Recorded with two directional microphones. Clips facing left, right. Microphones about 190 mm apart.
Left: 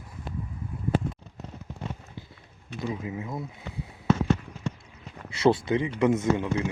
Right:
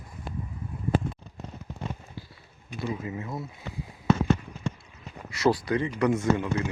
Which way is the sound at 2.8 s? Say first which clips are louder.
Even; 10° left (ahead or behind).